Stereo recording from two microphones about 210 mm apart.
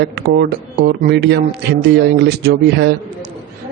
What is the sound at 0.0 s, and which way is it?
Speech, 50° right (ahead or behind).